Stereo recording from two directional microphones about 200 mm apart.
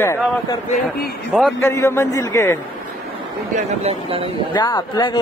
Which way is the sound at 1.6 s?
15° left (ahead or behind).